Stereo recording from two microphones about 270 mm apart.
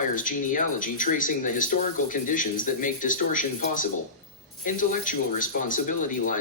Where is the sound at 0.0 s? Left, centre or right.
Left.